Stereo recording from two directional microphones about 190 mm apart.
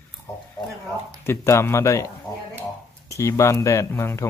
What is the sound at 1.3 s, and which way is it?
Speech, 15° left (ahead or behind).